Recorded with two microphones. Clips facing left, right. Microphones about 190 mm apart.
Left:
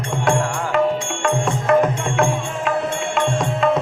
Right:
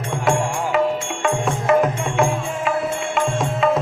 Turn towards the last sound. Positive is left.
turn(degrees=0)  # may be behind; listen again after turning